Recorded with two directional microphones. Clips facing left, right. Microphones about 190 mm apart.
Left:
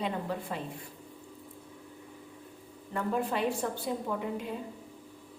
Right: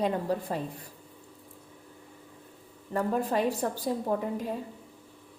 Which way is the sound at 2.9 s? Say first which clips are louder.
Right 3 dB; 40° right (ahead or behind).